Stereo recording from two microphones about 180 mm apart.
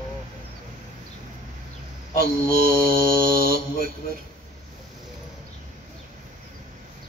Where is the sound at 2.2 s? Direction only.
55° right (ahead or behind).